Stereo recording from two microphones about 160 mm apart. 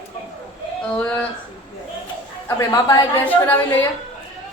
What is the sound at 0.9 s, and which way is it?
Speech, 5° left (ahead or behind).